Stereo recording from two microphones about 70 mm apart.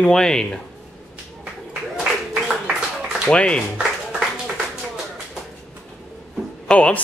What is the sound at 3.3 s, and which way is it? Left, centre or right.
Speech, centre.